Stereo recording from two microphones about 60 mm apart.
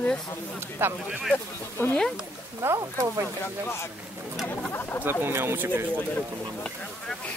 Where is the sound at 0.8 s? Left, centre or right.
Right.